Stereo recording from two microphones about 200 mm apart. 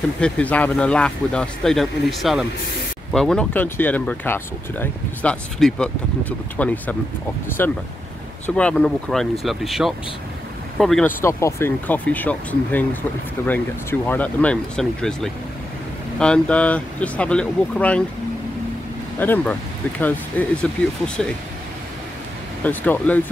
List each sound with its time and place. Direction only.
0.2 s speech: 5° left (ahead or behind)
19.1 s speech: 10° left (ahead or behind)
22.6 s speech: 10° left (ahead or behind)